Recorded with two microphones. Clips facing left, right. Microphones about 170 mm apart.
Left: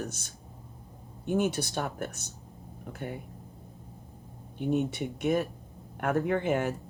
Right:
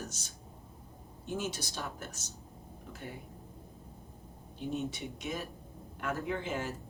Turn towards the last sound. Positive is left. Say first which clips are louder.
# left 8 dB
turn(degrees=60)  # may be behind; listen again after turning